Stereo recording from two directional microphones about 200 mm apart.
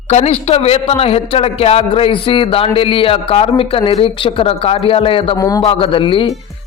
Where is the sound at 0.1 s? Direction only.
35° left (ahead or behind).